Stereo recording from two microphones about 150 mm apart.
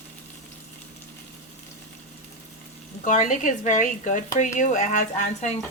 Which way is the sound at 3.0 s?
55° left (ahead or behind).